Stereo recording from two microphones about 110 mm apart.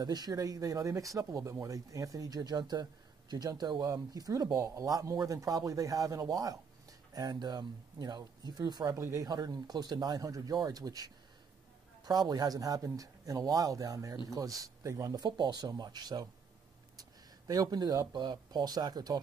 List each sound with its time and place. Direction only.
0.0 s speech: 35° right (ahead or behind)
17.5 s speech: 35° right (ahead or behind)